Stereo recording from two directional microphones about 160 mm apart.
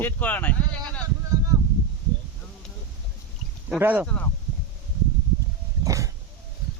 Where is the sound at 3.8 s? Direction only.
10° right (ahead or behind).